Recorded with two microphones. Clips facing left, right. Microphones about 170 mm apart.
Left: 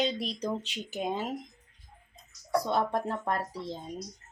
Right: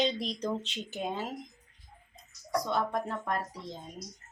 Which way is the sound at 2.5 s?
30° left (ahead or behind).